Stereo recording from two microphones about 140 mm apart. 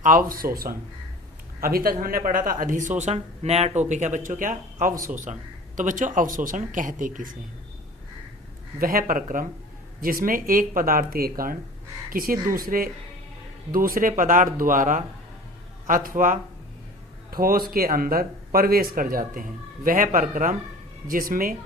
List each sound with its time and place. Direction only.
0.0 s a woman's voice: 80° right
8.8 s speech: 90° right
10.0 s speech: 90° right
14.1 s a woman's voice: 70° right (ahead or behind)
17.3 s speech: 90° right; by 20.6 s 70° right (ahead or behind)
21.1 s speech: 90° right